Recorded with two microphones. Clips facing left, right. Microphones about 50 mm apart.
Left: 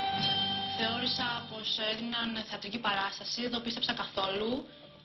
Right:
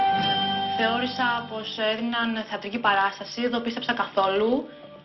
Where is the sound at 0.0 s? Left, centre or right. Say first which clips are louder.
Right 10 dB; right.